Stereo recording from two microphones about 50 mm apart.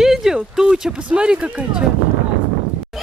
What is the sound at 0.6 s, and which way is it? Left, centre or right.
Speech, centre.